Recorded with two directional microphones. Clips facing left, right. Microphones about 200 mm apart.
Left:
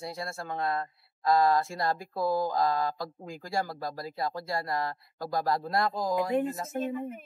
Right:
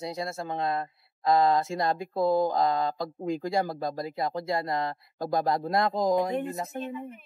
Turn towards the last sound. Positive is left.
turn(degrees=45)  # may be behind; listen again after turning